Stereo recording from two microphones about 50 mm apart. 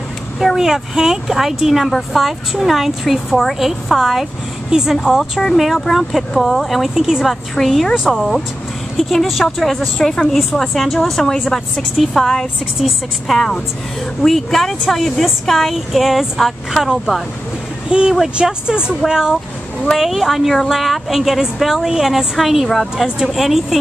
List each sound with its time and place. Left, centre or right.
0.6 s speech: centre
4.6 s a woman's voice: centre
12.7 s speech: centre
20.0 s speech: centre